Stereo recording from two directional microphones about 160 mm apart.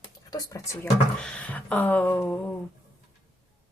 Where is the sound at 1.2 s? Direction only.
5° left (ahead or behind).